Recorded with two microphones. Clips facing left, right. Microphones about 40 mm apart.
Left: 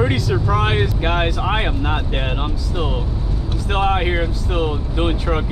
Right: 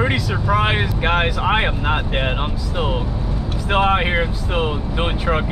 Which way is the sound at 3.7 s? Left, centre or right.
Centre.